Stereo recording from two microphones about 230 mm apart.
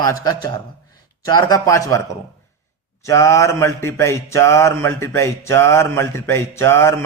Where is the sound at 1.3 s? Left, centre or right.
Centre.